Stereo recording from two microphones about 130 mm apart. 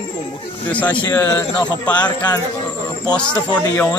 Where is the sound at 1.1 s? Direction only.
25° left (ahead or behind).